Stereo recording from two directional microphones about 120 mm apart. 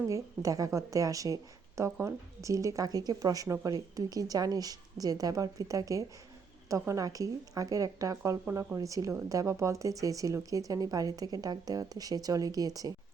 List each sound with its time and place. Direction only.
0.1 s speech: 30° right (ahead or behind)